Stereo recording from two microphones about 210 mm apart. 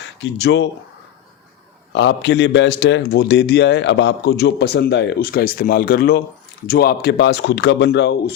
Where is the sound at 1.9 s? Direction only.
55° left (ahead or behind).